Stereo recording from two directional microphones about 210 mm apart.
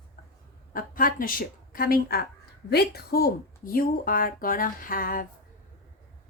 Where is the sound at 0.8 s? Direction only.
40° left (ahead or behind).